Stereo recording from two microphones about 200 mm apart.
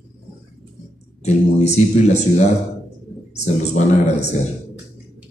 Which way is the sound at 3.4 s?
35° left (ahead or behind).